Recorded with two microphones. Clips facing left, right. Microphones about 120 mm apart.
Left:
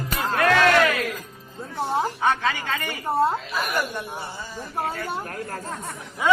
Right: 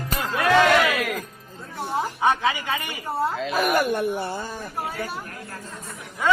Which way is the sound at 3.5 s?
55° right (ahead or behind).